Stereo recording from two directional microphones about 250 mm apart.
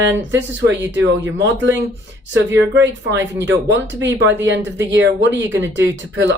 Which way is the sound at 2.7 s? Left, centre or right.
Right.